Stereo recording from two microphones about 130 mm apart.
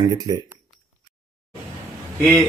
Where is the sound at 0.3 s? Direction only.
30° right (ahead or behind).